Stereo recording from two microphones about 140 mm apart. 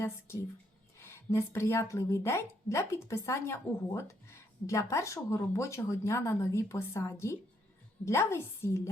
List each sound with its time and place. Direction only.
0.9 s a woman's voice: 20° left (ahead or behind)